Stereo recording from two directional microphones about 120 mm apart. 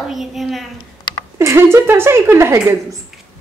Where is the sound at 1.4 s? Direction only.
20° right (ahead or behind).